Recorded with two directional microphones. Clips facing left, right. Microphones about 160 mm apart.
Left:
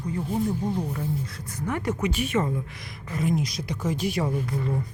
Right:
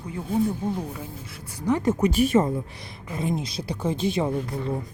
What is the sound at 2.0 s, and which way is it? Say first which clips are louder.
A woman's voice: right 6 dB; 35° right (ahead or behind).